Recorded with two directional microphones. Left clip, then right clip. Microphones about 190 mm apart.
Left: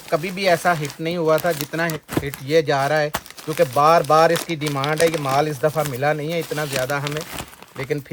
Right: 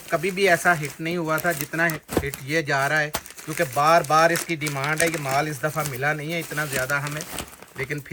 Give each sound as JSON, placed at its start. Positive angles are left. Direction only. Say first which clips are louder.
{"t": 0.1, "sound": "speech", "louder": "left 1 dB", "side_deg": 35}